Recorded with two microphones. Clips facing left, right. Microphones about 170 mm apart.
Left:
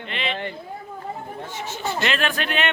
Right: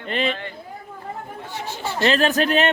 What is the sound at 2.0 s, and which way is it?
Speech, 35° right (ahead or behind).